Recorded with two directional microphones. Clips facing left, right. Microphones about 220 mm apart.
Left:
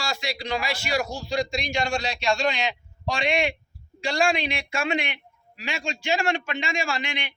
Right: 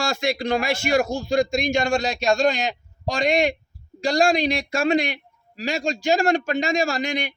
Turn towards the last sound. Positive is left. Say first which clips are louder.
# right 6 dB
turn(degrees=-40)  # may be behind; listen again after turning